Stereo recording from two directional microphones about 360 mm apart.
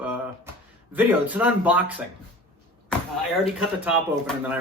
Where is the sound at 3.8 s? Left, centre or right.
Centre.